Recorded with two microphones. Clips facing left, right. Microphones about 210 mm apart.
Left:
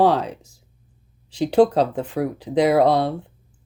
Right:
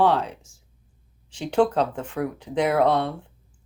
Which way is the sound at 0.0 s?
40° left (ahead or behind).